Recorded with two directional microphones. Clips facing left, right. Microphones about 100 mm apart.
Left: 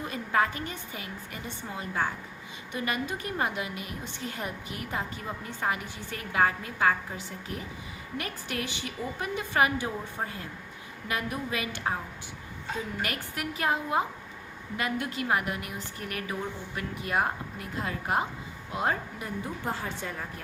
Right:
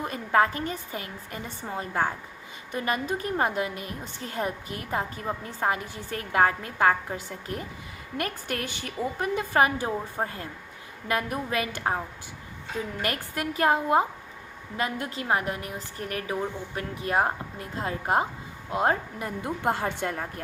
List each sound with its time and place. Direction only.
0.0 s a woman's voice: 45° right (ahead or behind)
13.0 s a woman's voice: 45° right (ahead or behind)
19.4 s a woman's voice: 65° right (ahead or behind)